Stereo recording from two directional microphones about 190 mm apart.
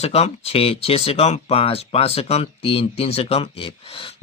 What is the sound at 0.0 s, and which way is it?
Speech, 35° left (ahead or behind).